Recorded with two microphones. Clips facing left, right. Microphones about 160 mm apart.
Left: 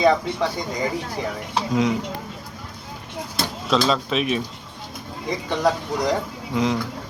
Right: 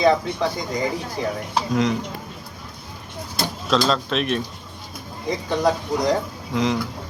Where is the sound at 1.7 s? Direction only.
5° left (ahead or behind).